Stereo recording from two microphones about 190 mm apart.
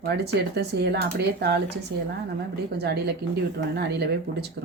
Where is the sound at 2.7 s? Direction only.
60° right (ahead or behind).